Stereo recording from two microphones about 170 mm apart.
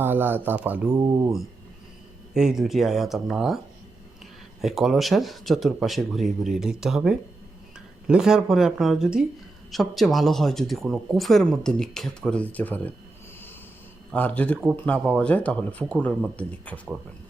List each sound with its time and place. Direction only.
0.0 s speech: 10° right (ahead or behind)
0.9 s speech: 20° right (ahead or behind)
2.3 s speech: 5° right (ahead or behind)
4.6 s speech: centre (ahead or behind)
14.1 s speech: 10° left (ahead or behind)